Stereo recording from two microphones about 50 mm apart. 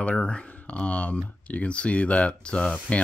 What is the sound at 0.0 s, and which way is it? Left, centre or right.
Speech, left.